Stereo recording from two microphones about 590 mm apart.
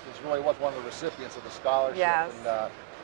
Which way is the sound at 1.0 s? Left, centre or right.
Left.